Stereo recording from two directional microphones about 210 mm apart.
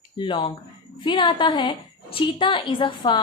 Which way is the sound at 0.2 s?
25° left (ahead or behind).